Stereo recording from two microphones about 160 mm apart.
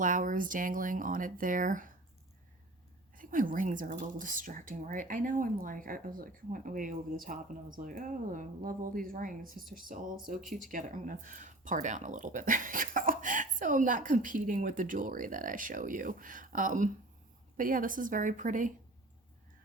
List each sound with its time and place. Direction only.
0.0 s speech: 55° right (ahead or behind)
3.2 s a woman's voice: 55° right (ahead or behind)